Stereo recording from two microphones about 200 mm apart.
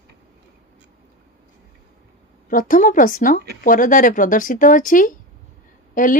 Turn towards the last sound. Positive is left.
turn(degrees=40)  # may be behind; listen again after turning